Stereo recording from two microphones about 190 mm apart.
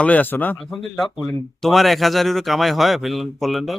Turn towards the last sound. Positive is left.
turn(degrees=0)  # may be behind; listen again after turning